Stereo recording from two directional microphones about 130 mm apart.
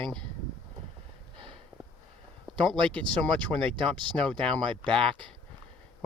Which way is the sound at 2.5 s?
5° left (ahead or behind).